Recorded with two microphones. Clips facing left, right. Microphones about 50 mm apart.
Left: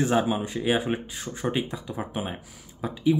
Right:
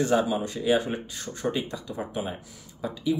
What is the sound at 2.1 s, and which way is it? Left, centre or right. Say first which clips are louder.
Speech: even; left.